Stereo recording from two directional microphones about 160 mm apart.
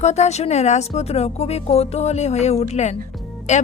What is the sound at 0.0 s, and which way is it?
A woman's voice, 45° left (ahead or behind).